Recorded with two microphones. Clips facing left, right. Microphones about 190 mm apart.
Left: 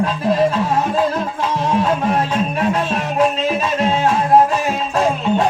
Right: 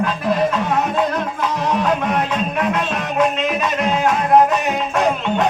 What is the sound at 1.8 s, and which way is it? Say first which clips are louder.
Music: left 1 dB; 30° left (ahead or behind).